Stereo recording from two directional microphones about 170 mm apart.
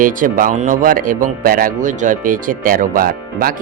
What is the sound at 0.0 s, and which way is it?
Speech, 55° right (ahead or behind).